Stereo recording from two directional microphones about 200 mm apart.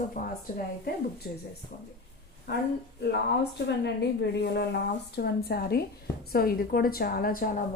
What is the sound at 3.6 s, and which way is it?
A woman's voice, 60° left (ahead or behind).